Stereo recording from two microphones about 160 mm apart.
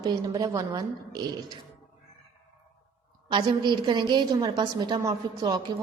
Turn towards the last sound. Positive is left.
turn(degrees=-25)  # may be behind; listen again after turning